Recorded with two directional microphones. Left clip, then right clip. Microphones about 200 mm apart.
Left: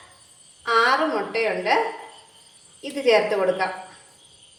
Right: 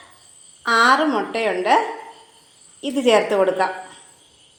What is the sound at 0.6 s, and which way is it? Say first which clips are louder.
A woman's voice: right 4 dB; 40° right (ahead or behind).